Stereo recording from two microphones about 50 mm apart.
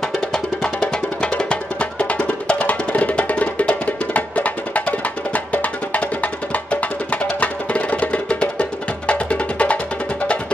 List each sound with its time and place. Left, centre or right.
0.3 s music: centre